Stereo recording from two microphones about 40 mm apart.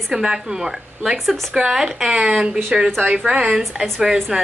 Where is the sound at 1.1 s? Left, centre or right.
Centre.